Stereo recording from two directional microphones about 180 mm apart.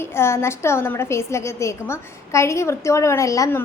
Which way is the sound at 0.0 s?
15° left (ahead or behind).